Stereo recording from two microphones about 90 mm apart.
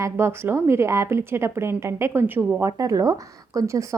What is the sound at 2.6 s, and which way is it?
A woman's voice, 40° right (ahead or behind).